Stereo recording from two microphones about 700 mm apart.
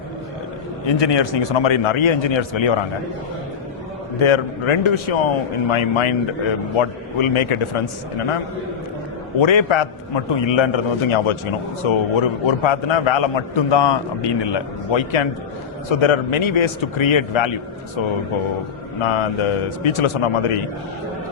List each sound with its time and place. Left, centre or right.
0.9 s a man's voice: left
4.2 s a man's voice: left
9.4 s a man's voice: left
19.0 s speech: left